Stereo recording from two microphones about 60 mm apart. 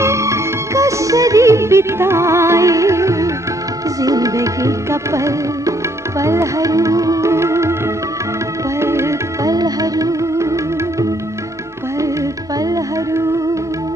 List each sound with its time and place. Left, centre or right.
0.0 s music: right
4.0 s music: right
7.2 s music: right
8.8 s music: right
9.4 s music: right
10.3 s music: right